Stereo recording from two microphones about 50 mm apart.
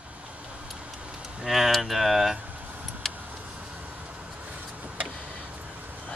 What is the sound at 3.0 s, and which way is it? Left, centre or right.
Vehicle, centre.